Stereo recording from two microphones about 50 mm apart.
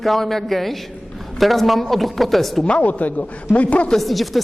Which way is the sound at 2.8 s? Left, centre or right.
Left.